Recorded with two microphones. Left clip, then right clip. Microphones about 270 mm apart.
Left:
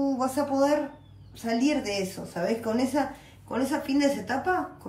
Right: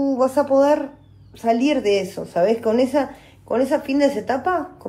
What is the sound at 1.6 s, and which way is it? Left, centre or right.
Speech, centre.